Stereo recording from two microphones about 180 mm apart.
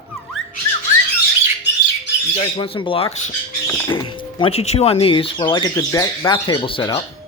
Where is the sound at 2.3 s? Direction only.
25° left (ahead or behind).